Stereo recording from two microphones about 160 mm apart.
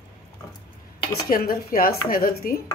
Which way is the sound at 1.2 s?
65° left (ahead or behind).